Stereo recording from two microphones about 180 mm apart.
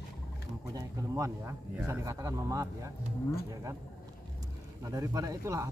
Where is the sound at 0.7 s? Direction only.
20° right (ahead or behind).